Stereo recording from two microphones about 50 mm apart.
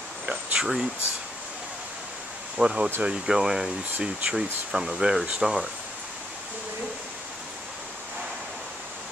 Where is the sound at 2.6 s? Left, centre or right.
Centre.